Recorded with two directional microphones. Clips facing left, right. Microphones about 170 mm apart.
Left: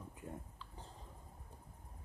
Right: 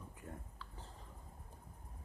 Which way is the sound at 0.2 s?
15° left (ahead or behind).